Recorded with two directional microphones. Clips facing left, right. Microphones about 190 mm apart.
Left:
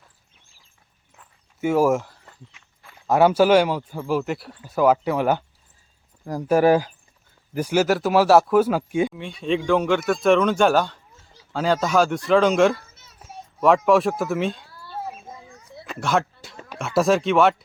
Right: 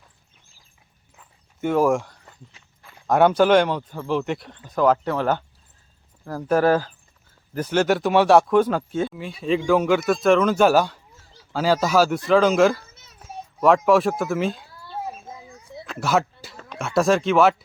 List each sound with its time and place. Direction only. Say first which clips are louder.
1.2 s walk: left 2 dB; 5° left (ahead or behind)
2.8 s speech: even; 5° left (ahead or behind)
9.1 s a child's voice: right 1 dB; 5° right (ahead or behind)
15.9 s speech: right 1 dB; 5° right (ahead or behind)